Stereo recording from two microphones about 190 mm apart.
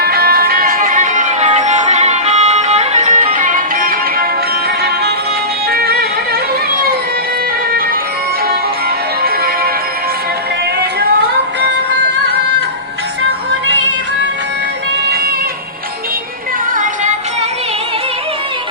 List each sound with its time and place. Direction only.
0.0 s music: 55° right (ahead or behind)
5.7 s music: 55° right (ahead or behind)
16.7 s music: 45° right (ahead or behind)